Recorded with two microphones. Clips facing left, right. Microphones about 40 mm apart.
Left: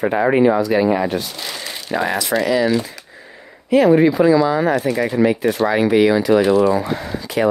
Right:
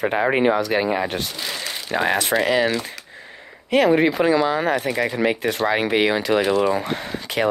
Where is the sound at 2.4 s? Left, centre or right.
Right.